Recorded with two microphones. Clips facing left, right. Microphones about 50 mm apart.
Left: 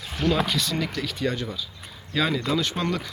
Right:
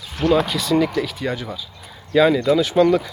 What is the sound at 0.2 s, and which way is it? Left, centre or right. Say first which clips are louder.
Speech: right 6 dB; centre.